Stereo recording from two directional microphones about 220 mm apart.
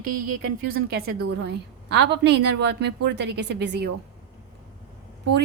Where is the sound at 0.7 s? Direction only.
45° right (ahead or behind).